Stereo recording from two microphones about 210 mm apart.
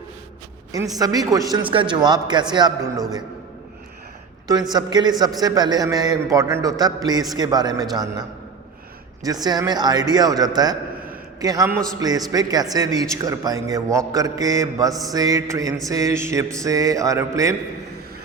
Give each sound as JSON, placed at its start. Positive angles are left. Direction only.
{"t": 0.9, "sound": "a man's voice", "side_deg": -15}
{"t": 4.7, "sound": "a man's voice", "side_deg": -20}
{"t": 9.2, "sound": "a man's voice", "side_deg": -20}